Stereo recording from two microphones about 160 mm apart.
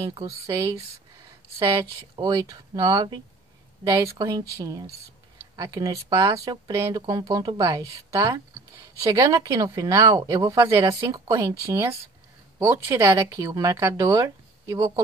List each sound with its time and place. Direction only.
0.0 s speech: 20° right (ahead or behind)
2.1 s speech: 25° right (ahead or behind)